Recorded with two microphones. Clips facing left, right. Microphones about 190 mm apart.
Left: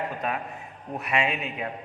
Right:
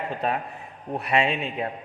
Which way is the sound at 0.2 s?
35° right (ahead or behind).